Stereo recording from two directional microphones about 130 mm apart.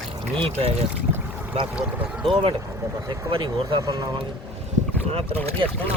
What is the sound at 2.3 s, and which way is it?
Speech, 40° right (ahead or behind).